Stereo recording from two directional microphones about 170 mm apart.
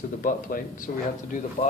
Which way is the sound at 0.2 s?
55° left (ahead or behind).